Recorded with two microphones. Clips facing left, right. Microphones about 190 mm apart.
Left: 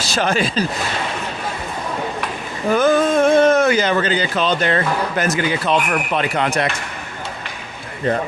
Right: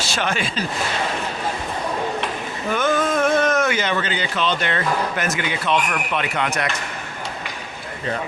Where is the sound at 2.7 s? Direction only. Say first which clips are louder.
Left 6 dB; 35° left (ahead or behind).